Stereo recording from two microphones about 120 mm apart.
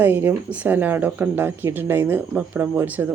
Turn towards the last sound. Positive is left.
turn(degrees=-15)  # may be behind; listen again after turning